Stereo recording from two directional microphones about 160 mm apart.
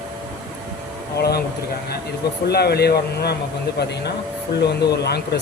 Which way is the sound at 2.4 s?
90° left.